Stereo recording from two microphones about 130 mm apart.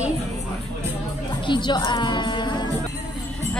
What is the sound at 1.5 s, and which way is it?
Speech, 35° left (ahead or behind).